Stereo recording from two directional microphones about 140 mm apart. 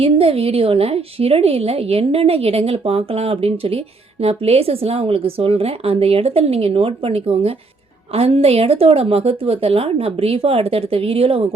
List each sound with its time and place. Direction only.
0.0 s a woman's voice: 45° right (ahead or behind)